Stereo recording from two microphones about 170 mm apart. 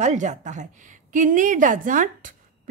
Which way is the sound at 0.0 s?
45° right (ahead or behind).